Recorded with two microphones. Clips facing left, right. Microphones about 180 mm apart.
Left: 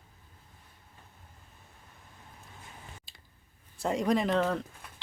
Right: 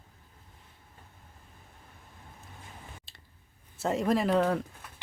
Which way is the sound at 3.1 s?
Centre (ahead or behind).